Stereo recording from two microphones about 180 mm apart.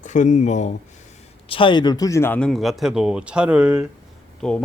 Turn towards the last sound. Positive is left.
turn(degrees=5)  # may be behind; listen again after turning